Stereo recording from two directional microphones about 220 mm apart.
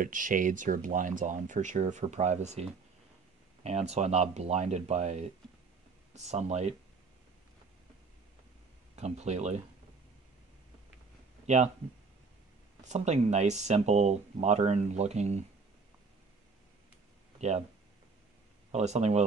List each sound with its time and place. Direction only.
0.0 s speech: 35° right (ahead or behind)
8.9 s speech: 30° right (ahead or behind)
11.4 s speech: 30° right (ahead or behind)
12.8 s speech: 30° right (ahead or behind)
17.4 s speech: 30° right (ahead or behind)
18.7 s speech: 30° right (ahead or behind)